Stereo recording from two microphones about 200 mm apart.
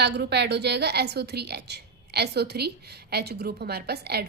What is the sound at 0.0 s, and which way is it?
A woman's voice, 55° right (ahead or behind).